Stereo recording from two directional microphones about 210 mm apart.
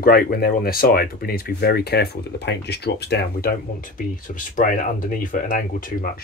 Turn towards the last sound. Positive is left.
turn(degrees=40)  # may be behind; listen again after turning